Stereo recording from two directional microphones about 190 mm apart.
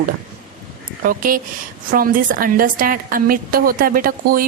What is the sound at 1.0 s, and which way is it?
A woman's voice, 45° right (ahead or behind).